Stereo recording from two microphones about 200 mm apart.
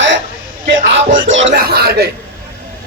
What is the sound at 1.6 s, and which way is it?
Speech, 50° right (ahead or behind).